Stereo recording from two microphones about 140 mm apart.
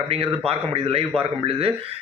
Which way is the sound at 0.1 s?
45° right (ahead or behind).